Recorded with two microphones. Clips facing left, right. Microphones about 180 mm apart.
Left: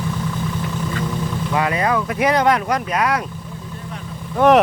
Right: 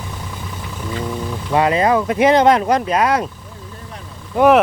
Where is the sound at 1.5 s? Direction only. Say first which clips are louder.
Right 5 dB; 25° right (ahead or behind).